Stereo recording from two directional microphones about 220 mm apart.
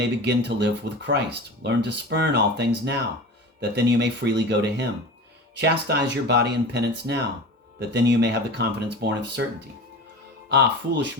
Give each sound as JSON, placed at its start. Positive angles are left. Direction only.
{"t": 0.0, "sound": "speech", "side_deg": -50}
{"t": 10.5, "sound": "speech", "side_deg": -55}